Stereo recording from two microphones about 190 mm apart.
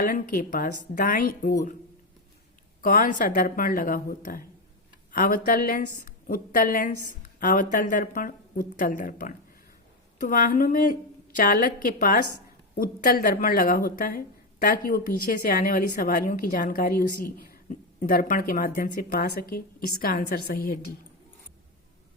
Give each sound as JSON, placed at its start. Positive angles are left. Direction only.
{"t": 0.0, "sound": "speech", "side_deg": 45}
{"t": 2.8, "sound": "speech", "side_deg": 45}